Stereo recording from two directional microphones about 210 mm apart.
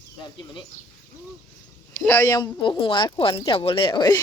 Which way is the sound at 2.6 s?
20° left (ahead or behind).